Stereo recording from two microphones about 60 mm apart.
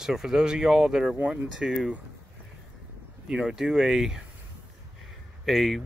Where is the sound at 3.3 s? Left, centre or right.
Centre.